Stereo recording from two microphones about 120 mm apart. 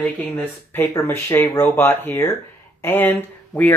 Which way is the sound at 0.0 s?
10° left (ahead or behind).